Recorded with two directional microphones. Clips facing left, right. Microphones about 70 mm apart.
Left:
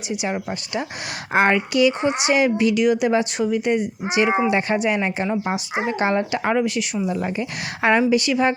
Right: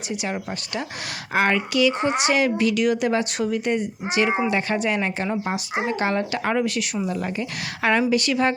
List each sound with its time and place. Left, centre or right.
0.3 s speech: centre
1.3 s a woman's voice: left; by 5.8 s centre
5.9 s a woman's voice: left; by 7.0 s centre
7.1 s a woman's voice: centre
8.1 s a woman's voice: centre